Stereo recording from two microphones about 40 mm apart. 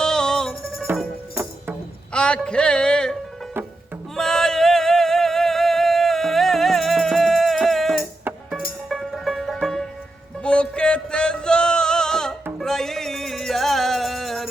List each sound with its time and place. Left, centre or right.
0.0 s music: centre
2.1 s music: left
4.1 s a sound: centre
8.9 s music: centre
9.6 s music: centre
10.4 s music: left; by 14.5 s centre